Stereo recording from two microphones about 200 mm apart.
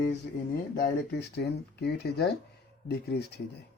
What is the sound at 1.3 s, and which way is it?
Speech, 55° left (ahead or behind).